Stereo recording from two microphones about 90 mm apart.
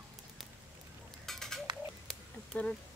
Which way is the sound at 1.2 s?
5° left (ahead or behind).